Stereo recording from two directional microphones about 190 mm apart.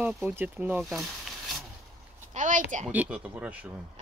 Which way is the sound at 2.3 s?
45° right (ahead or behind).